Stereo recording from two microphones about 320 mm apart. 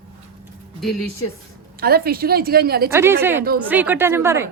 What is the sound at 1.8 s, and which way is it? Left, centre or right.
A woman's voice, right.